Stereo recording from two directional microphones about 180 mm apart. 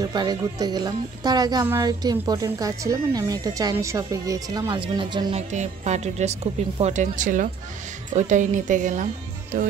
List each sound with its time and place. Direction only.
0.0 s a woman's voice: 25° right (ahead or behind)
5.5 s a woman's voice: 40° right (ahead or behind)